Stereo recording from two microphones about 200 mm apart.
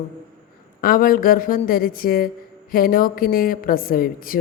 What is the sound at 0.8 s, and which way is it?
A woman's voice, 45° left (ahead or behind).